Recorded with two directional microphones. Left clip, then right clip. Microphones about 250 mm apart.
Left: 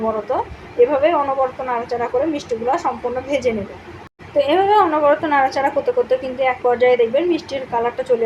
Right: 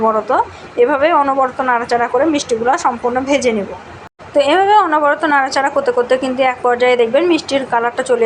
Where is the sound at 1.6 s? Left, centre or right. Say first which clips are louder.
Right 7 dB; centre.